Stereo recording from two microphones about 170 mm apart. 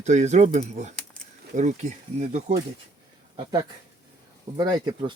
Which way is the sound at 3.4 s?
25° right (ahead or behind).